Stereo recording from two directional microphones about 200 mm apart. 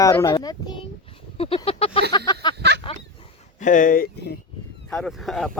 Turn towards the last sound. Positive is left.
turn(degrees=0)  # may be behind; listen again after turning